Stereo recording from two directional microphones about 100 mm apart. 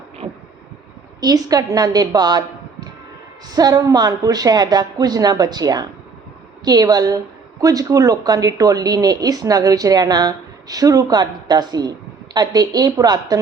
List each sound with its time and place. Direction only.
1.2 s speech: 40° right (ahead or behind)
3.5 s speech: 40° right (ahead or behind)